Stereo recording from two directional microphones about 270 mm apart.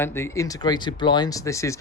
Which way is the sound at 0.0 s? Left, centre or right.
Centre.